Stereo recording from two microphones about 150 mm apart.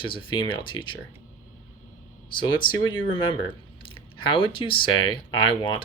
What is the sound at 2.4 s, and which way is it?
Speech, 30° left (ahead or behind).